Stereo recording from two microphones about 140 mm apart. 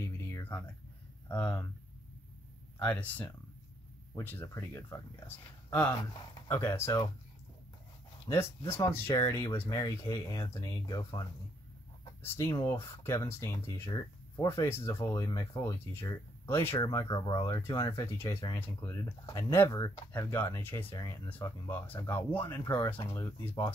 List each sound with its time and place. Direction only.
0.0 s a sound: 20° left (ahead or behind)
1.3 s speech: 20° left (ahead or behind)
2.8 s speech: 10° left (ahead or behind)
8.3 s speech: 20° left (ahead or behind)
12.2 s speech: 20° left (ahead or behind)
16.7 s speech: 30° left (ahead or behind)